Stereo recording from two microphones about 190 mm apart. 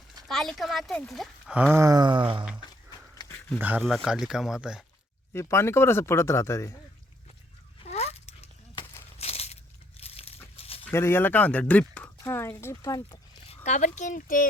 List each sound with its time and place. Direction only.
0.3 s speech: centre (ahead or behind); by 2.4 s 25° right (ahead or behind)
3.2 s a sound: 15° left (ahead or behind)
3.6 s speech: 5° right (ahead or behind)
5.3 s speech: 15° left (ahead or behind)
7.8 s a sound: 35° left (ahead or behind)
10.9 s speech: 10° left (ahead or behind)
13.7 s speech: 40° left (ahead or behind)